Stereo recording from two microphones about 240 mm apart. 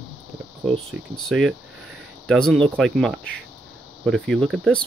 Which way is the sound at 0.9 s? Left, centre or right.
Centre.